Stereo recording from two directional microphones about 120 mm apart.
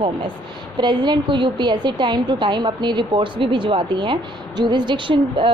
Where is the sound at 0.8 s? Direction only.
40° right (ahead or behind).